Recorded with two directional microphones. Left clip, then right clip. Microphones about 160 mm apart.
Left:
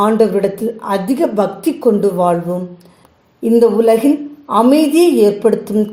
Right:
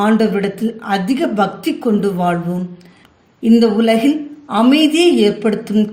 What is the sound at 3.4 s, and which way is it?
A woman's voice, 35° left (ahead or behind).